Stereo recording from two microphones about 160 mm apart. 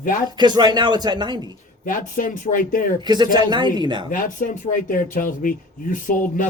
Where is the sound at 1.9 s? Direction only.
55° left (ahead or behind).